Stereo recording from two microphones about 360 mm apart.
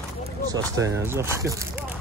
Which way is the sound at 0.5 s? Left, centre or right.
Centre.